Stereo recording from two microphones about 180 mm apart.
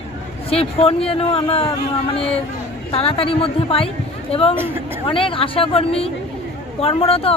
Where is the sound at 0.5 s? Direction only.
30° left (ahead or behind).